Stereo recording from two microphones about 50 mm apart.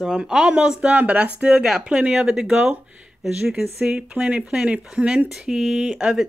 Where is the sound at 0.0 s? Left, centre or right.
Centre.